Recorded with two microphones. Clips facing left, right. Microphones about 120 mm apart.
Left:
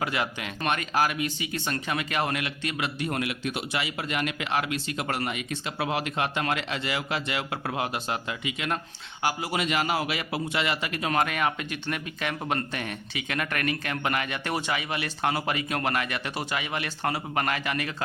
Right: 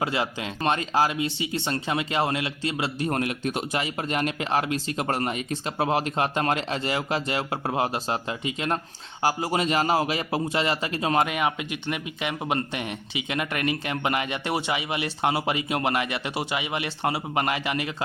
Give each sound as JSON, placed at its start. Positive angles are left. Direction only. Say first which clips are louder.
{"t": 0.0, "sound": "a man's voice", "louder": "right 2 dB", "side_deg": -25}